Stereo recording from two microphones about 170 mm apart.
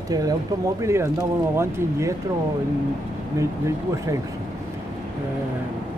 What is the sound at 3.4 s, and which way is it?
Speech, 20° right (ahead or behind).